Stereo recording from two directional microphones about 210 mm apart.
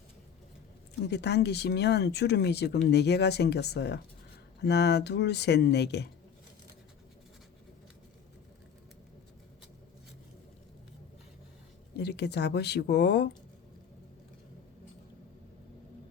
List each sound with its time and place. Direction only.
1.0 s speech: 55° left (ahead or behind)
11.9 s speech: 55° left (ahead or behind)